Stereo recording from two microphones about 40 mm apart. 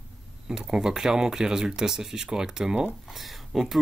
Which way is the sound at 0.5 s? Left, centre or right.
Centre.